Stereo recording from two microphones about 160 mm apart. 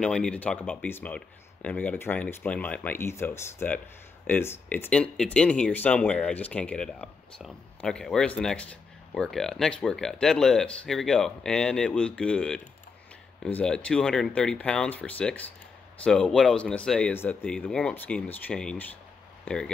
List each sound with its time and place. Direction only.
0.0 s speech: 5° left (ahead or behind)